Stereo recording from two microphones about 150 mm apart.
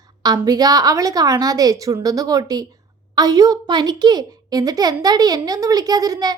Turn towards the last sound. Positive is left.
turn(degrees=-25)  # may be behind; listen again after turning